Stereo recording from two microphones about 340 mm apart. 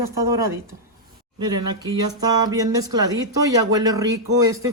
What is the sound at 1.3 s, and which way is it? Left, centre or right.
Speech, centre.